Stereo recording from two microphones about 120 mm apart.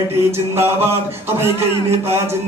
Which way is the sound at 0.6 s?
20° right (ahead or behind).